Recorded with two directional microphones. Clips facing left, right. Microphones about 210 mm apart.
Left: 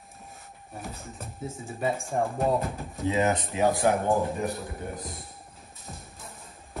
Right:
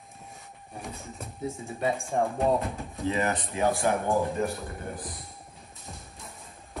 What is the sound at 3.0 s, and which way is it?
Speech, 20° left (ahead or behind).